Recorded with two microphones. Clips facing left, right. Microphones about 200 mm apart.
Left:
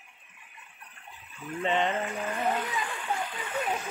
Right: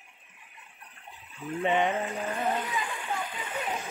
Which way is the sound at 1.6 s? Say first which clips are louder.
Right 1 dB; 15° right (ahead or behind).